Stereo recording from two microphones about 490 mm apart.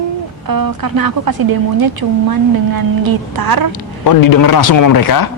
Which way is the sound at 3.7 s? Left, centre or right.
Left.